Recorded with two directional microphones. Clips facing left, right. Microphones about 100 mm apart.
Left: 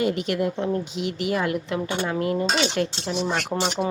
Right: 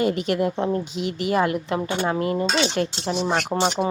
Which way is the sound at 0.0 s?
40° right (ahead or behind).